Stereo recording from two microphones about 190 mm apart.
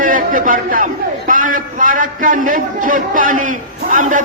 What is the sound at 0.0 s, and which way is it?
A man's voice, 45° right (ahead or behind).